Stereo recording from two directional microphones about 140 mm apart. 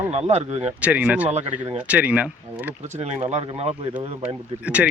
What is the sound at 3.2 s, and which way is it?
Speech, 45° right (ahead or behind).